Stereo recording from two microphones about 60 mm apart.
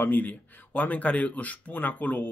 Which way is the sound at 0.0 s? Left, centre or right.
Left.